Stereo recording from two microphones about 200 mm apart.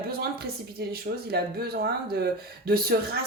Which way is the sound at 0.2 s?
50° right (ahead or behind).